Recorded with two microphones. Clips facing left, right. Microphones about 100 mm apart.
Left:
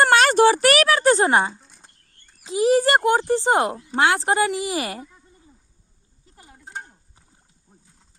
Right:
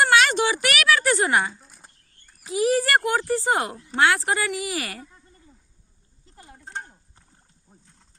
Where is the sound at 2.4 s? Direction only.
25° left (ahead or behind).